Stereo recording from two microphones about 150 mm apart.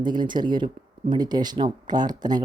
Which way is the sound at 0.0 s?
30° right (ahead or behind).